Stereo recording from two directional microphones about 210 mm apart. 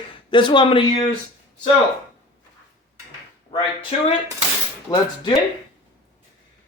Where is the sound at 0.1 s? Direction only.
25° left (ahead or behind).